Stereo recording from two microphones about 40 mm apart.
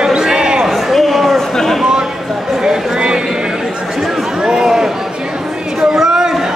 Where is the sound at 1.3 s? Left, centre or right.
Centre.